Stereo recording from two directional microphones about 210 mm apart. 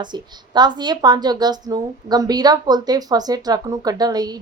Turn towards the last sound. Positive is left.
turn(degrees=-20)  # may be behind; listen again after turning